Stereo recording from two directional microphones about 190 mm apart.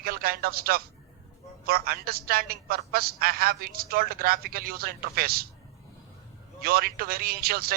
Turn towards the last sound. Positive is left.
turn(degrees=-55)  # may be behind; listen again after turning